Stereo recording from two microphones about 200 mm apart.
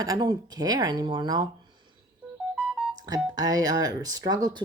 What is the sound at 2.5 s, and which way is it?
Music, 5° right (ahead or behind).